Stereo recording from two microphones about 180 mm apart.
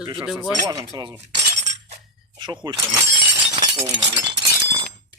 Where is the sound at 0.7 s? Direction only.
25° right (ahead or behind).